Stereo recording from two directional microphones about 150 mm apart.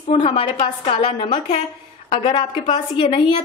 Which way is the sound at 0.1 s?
35° left (ahead or behind).